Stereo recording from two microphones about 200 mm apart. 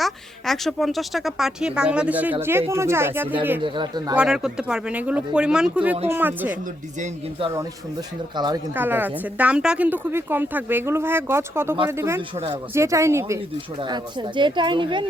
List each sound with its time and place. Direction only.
0.0 s a woman's voice: centre (ahead or behind); by 4.1 s 20° right (ahead or behind)
4.1 s a woman's voice: 5° right (ahead or behind)
7.0 s speech: 30° right (ahead or behind)
8.7 s speech: 10° right (ahead or behind)